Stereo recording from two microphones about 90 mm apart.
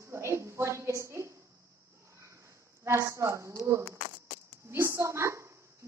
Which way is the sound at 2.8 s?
35° right (ahead or behind).